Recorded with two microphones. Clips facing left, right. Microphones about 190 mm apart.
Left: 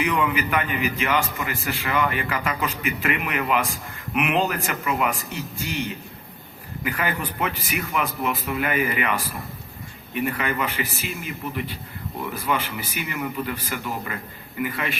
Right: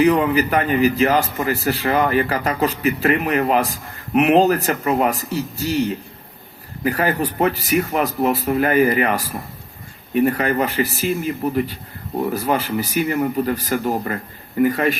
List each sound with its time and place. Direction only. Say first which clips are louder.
0.0 s a man's voice: right 8 dB; 35° right (ahead or behind)